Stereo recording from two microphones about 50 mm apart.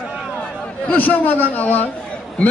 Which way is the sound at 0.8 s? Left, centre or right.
Left.